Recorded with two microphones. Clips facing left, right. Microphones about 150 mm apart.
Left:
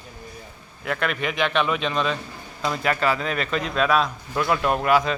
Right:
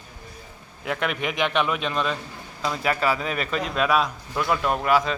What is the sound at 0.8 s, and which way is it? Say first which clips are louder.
A man's voice: left 1 dB; 15° right (ahead or behind).